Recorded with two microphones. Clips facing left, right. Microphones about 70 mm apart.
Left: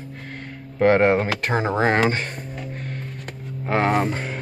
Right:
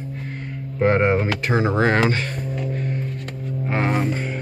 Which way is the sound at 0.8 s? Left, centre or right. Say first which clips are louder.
Left 2 dB; left.